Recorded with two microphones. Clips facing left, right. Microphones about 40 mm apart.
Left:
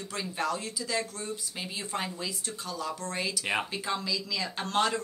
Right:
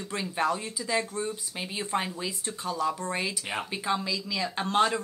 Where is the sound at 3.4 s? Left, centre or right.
Centre.